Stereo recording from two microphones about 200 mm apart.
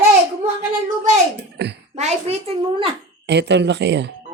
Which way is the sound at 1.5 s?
55° right (ahead or behind).